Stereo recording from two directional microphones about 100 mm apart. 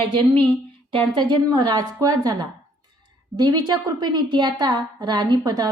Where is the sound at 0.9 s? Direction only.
50° right (ahead or behind).